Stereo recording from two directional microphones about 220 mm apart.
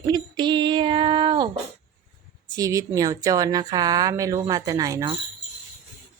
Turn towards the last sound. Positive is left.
turn(degrees=-20)  # may be behind; listen again after turning